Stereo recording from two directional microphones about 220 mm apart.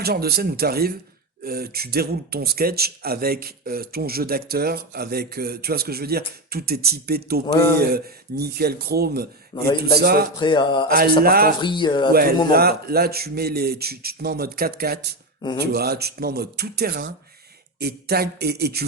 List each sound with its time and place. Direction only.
0.0 s speech: 45° right (ahead or behind)
7.4 s speech: 10° left (ahead or behind)
7.9 s speech: 45° right (ahead or behind)
9.5 s a sound: 20° left (ahead or behind)
10.0 s speech: 45° right (ahead or behind)
10.3 s a sound: 20° left (ahead or behind)
11.2 s speech: 45° right (ahead or behind)
11.6 s a sound: 20° left (ahead or behind)
12.5 s speech: 45° right (ahead or behind)